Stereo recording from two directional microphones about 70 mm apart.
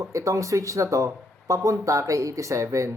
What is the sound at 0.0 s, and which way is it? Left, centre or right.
Speech, right.